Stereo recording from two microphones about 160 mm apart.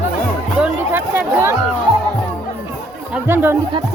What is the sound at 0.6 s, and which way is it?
Speech, 10° right (ahead or behind).